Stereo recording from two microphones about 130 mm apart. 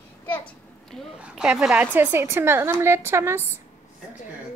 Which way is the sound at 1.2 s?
5° right (ahead or behind).